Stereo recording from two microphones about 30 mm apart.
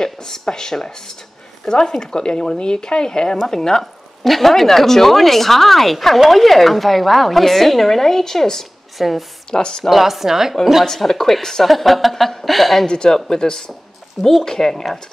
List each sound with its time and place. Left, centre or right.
0.0 s speech: left
3.8 s a woman's voice: centre
8.9 s a woman's voice: centre
9.5 s speech: left
9.8 s a woman's voice: centre
11.1 s speech: centre
11.6 s a woman's voice: centre
12.8 s speech: left